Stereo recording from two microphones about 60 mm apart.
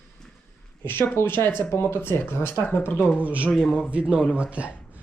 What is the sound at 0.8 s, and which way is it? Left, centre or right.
Speech, left.